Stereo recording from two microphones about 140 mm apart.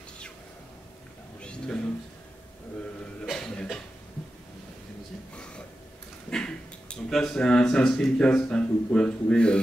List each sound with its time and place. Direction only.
1.4 s a sound: 5° left (ahead or behind)
3.3 s cough: 5° left (ahead or behind)
6.3 s speech: 5° left (ahead or behind)